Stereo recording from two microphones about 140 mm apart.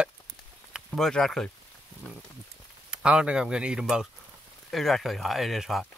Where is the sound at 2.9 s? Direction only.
10° right (ahead or behind).